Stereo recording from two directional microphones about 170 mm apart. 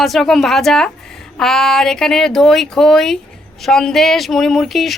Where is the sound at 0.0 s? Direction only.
Centre (ahead or behind).